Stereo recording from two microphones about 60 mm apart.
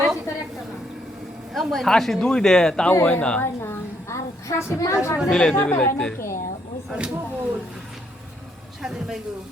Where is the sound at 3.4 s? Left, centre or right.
Left.